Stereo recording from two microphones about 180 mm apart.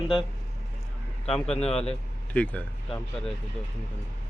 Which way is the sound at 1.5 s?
35° left (ahead or behind).